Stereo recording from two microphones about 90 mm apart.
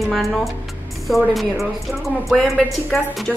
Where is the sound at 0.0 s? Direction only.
Centre (ahead or behind).